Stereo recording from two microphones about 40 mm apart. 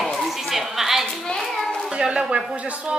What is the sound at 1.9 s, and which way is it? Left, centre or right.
Speech, right.